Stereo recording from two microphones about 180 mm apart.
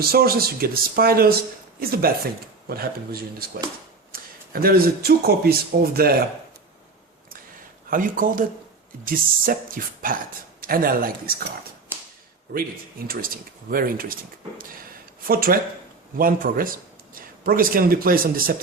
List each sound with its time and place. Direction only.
0.0 s speech: 60° right (ahead or behind)
7.9 s speech: 50° right (ahead or behind)
11.9 s whip: 10° right (ahead or behind)
12.5 s a man's voice: 55° right (ahead or behind)